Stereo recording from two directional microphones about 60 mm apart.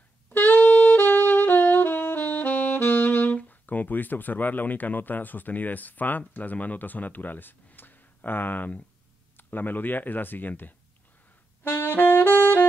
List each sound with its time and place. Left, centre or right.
0.3 s saxophone: left
9.4 s speech: left
11.6 s saxophone: left